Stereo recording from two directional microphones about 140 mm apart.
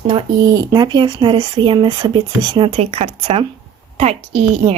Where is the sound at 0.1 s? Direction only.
30° right (ahead or behind).